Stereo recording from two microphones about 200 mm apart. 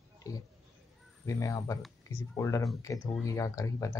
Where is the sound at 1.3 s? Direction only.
15° left (ahead or behind).